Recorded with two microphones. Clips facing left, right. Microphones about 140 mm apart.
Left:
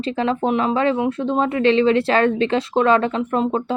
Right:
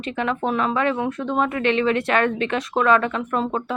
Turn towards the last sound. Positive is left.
turn(degrees=25)  # may be behind; listen again after turning